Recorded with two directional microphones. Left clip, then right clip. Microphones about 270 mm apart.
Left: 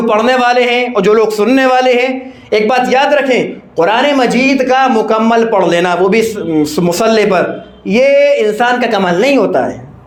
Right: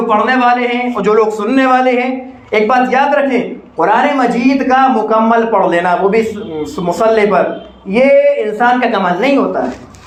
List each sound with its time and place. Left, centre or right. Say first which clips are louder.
0.1 s speech: left 1 dB; left